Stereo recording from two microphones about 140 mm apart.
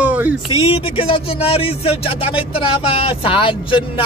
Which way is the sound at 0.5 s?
45° left (ahead or behind).